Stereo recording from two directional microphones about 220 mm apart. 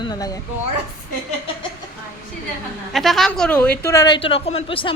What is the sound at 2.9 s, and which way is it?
A woman's voice, centre (ahead or behind).